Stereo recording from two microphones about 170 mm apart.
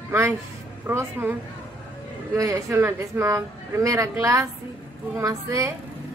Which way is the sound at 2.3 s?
20° right (ahead or behind).